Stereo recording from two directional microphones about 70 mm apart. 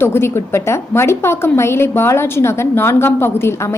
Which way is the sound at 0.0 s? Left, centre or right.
Left.